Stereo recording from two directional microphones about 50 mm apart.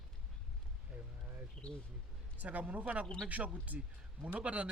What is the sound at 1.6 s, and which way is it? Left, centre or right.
Speech, centre.